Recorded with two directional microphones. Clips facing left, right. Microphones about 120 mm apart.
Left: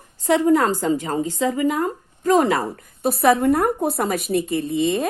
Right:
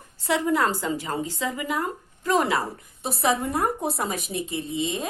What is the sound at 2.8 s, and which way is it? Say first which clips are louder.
A woman's voice: left 8 dB; 55° left (ahead or behind).